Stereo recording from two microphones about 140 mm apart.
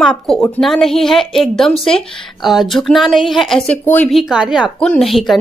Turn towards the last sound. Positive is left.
turn(degrees=0)  # may be behind; listen again after turning